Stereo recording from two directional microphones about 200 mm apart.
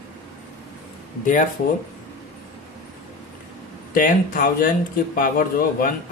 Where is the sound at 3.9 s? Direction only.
45° left (ahead or behind).